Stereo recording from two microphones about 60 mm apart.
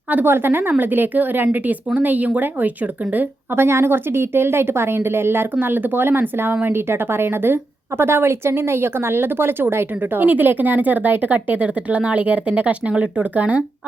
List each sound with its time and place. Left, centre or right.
0.1 s speech: right